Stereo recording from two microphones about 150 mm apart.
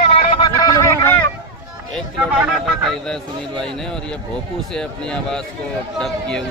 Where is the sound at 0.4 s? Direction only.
25° left (ahead or behind).